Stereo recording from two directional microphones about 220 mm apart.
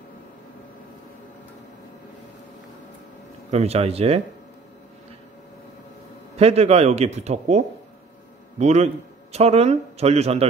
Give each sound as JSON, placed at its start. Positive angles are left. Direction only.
{"t": 3.5, "sound": "a man's voice", "side_deg": -30}
{"t": 6.3, "sound": "a man's voice", "side_deg": -30}